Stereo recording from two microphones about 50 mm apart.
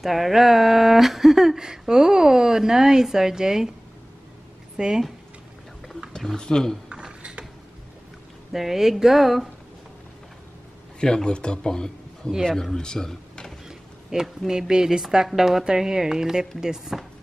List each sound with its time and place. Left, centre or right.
0.0 s speech: centre
4.7 s speech: centre
6.3 s speech: centre
6.9 s a sound: centre
8.5 s speech: centre
11.0 s speech: centre
12.7 s a sound: centre
13.7 s a sound: centre
14.5 s speech: centre